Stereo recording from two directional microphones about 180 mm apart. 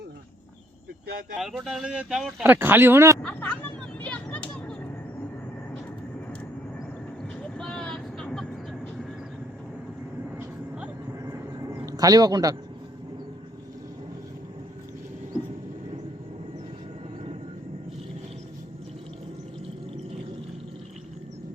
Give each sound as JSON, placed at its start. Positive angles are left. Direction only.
{"t": 1.0, "sound": "speech", "side_deg": -55}
{"t": 1.4, "sound": "speech", "side_deg": 0}
{"t": 3.2, "sound": "vehicle", "side_deg": 10}
{"t": 7.5, "sound": "vehicle", "side_deg": 5}
{"t": 11.3, "sound": "a sound", "side_deg": -20}